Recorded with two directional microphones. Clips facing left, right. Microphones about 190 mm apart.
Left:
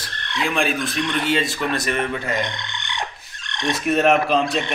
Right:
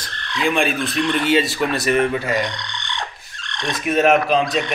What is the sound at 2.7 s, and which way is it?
Fowl, 20° left (ahead or behind).